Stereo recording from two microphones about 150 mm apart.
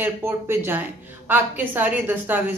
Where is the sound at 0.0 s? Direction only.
15° right (ahead or behind).